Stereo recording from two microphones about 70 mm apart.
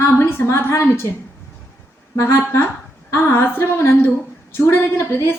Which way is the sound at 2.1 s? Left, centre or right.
Left.